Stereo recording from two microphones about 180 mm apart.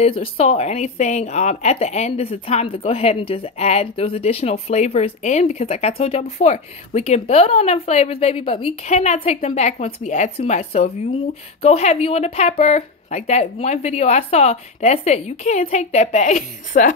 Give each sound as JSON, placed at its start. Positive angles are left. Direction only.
{"t": 0.0, "sound": "speech", "side_deg": 35}